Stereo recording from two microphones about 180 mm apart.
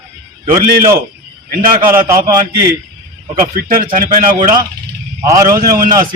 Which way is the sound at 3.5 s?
55° right (ahead or behind).